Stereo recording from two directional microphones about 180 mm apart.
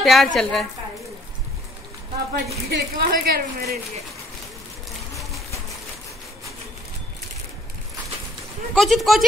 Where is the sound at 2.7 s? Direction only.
65° right (ahead or behind).